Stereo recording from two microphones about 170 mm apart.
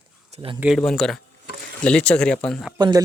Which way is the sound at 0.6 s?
Centre (ahead or behind).